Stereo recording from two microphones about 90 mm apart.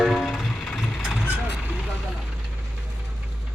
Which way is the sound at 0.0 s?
Centre (ahead or behind).